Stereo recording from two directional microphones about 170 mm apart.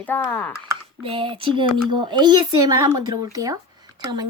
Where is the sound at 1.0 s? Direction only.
30° right (ahead or behind).